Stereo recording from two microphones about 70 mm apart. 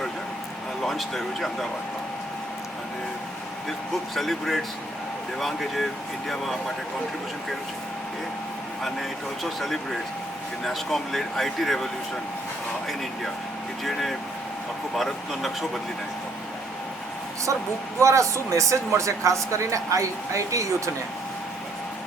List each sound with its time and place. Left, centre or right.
0.9 s speech: centre
3.7 s speech: centre
8.8 s speech: centre
13.8 s speech: centre
18.0 s speech: right